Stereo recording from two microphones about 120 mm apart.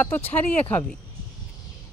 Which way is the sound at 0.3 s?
15° left (ahead or behind).